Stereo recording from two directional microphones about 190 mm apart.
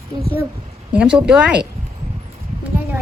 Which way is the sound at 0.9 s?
5° right (ahead or behind).